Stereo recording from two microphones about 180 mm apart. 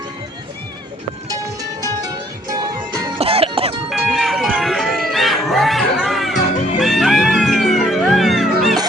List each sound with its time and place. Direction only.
1.8 s music: 20° right (ahead or behind)
3.2 s music: 30° right (ahead or behind)
3.8 s music: centre (ahead or behind)